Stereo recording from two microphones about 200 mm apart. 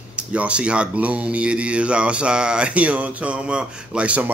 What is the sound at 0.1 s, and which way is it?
A man's voice, 5° right (ahead or behind).